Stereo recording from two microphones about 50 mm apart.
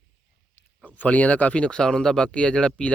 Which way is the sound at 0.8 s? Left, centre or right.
Left.